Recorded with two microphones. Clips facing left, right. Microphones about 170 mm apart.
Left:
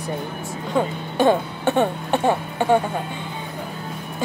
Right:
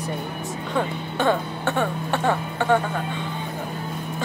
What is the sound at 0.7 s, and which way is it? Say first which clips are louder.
Speech: left 4 dB; 15° left (ahead or behind).